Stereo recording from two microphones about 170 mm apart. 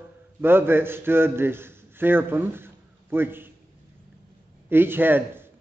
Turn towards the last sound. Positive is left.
turn(degrees=-10)  # may be behind; listen again after turning